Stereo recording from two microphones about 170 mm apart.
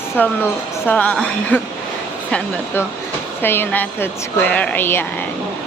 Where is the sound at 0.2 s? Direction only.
10° left (ahead or behind).